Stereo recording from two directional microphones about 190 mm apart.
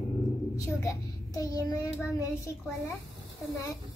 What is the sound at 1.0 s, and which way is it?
Child singing, centre (ahead or behind).